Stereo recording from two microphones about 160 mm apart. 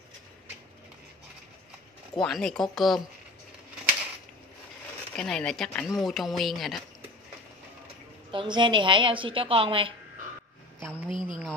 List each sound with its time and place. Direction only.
2.1 s speech: 5° left (ahead or behind)
5.1 s speech: 5° left (ahead or behind)
8.3 s a woman's voice: 30° right (ahead or behind)
11.1 s speech: 30° left (ahead or behind)